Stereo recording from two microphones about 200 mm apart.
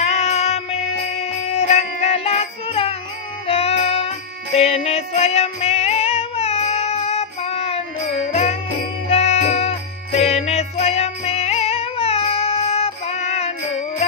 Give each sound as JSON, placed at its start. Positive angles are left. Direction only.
{"t": 0.0, "sound": "music", "side_deg": 35}